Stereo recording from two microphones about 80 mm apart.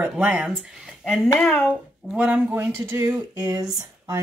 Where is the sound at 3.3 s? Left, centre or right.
Right.